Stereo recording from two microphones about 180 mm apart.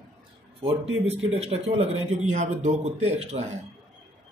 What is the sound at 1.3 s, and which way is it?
A man's voice, 35° right (ahead or behind).